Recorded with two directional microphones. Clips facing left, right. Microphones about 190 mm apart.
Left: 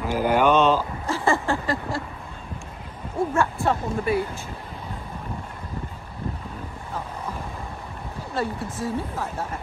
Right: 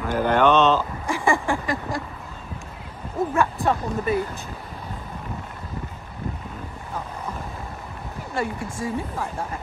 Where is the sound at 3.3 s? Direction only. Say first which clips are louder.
Right 2 dB; 15° right (ahead or behind).